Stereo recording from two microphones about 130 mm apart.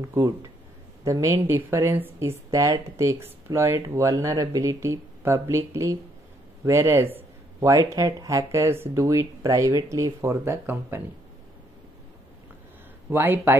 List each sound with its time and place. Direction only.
0.1 s speech: 25° right (ahead or behind)
13.1 s speech: 15° right (ahead or behind)